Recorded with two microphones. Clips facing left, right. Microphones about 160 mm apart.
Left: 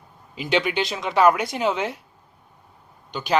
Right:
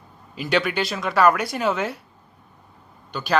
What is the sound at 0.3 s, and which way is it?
Speech, 20° left (ahead or behind).